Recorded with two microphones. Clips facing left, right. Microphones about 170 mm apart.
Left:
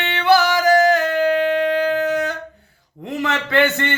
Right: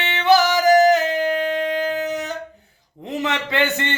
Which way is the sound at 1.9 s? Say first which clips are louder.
Left 5 dB; 20° right (ahead or behind).